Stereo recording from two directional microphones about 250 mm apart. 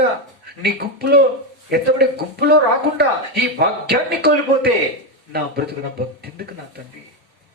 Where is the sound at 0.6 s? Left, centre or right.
Right.